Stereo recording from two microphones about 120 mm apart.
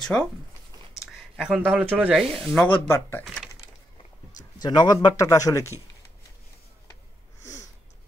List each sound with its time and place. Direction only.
0.1 s speech: 10° left (ahead or behind)
1.1 s speech: 5° right (ahead or behind)
2.4 s speech: 10° left (ahead or behind)
2.9 s speech: 20° left (ahead or behind)
4.6 s speech: 35° left (ahead or behind)